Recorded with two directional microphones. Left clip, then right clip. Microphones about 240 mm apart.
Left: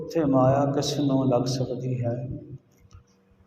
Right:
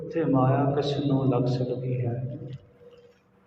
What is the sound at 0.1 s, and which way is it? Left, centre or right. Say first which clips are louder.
A man's voice: left 3 dB; left.